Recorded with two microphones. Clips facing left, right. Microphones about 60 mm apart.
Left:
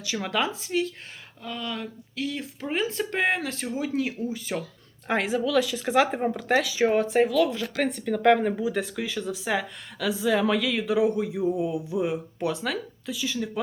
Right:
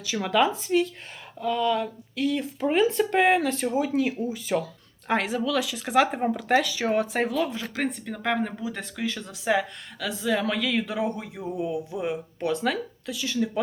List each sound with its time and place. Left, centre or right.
0.1 s speech: centre
6.7 s speech: centre
6.9 s speech: centre
7.3 s speech: right
7.5 s speech: centre
7.9 s speech: centre